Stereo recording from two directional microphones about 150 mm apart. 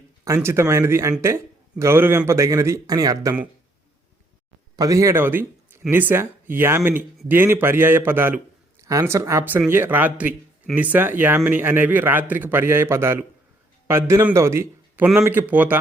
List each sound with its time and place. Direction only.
0.3 s a man's voice: 15° right (ahead or behind)
4.8 s a man's voice: 20° right (ahead or behind)